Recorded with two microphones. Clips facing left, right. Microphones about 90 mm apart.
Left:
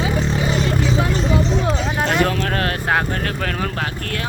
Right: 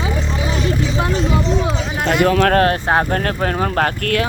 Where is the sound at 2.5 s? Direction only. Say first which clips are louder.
Right 5 dB; 30° right (ahead or behind).